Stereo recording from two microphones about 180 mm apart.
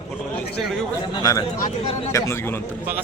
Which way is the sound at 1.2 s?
20° left (ahead or behind).